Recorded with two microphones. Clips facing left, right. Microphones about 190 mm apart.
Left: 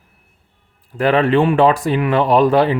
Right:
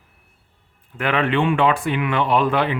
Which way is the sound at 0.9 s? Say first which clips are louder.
Left 6 dB; 35° left (ahead or behind).